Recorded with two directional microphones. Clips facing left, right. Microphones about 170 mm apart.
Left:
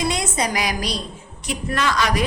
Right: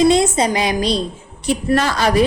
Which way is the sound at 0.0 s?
25° right (ahead or behind).